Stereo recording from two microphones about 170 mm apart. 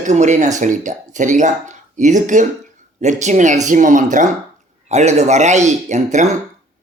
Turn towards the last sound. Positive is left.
turn(degrees=-45)  # may be behind; listen again after turning